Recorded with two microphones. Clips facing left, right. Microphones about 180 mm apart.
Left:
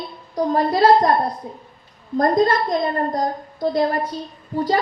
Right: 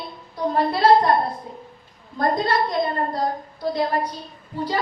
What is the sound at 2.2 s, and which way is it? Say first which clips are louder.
A woman's voice: left 4 dB; 45° left (ahead or behind).